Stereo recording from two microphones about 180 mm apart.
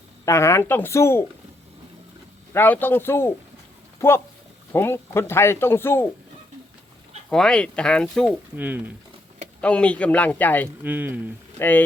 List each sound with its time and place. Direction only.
0.3 s speech: 15° left (ahead or behind)
2.5 s speech: 10° left (ahead or behind)
7.3 s speech: 5° left (ahead or behind)
8.5 s speech: 10° right (ahead or behind)
9.6 s speech: 5° left (ahead or behind)
10.8 s speech: 10° right (ahead or behind)